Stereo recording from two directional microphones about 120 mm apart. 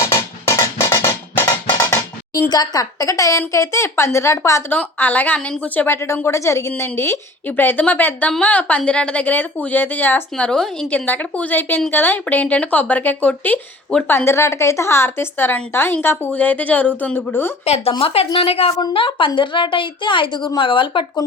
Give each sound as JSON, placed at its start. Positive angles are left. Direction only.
{"t": 0.1, "sound": "music", "side_deg": 25}
{"t": 2.5, "sound": "a woman's voice", "side_deg": 35}
{"t": 4.7, "sound": "a woman's voice", "side_deg": 15}
{"t": 14.3, "sound": "a woman's voice", "side_deg": 25}
{"t": 17.9, "sound": "a woman's voice", "side_deg": 50}